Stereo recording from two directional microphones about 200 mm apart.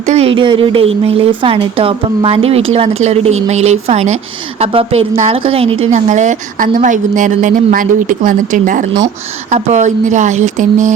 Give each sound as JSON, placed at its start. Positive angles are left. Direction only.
{"t": 0.1, "sound": "a woman's voice", "side_deg": -30}